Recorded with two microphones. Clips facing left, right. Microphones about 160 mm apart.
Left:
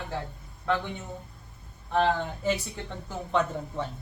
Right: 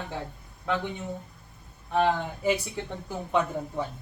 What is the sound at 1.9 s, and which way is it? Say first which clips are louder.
A man's voice: even; 10° right (ahead or behind).